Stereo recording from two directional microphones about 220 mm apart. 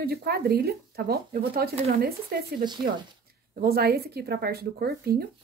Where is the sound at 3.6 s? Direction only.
45° right (ahead or behind).